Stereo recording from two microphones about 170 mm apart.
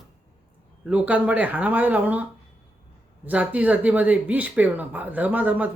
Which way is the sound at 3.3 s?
10° right (ahead or behind).